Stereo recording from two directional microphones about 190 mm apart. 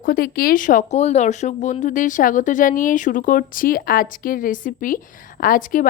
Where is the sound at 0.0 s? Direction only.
50° left (ahead or behind).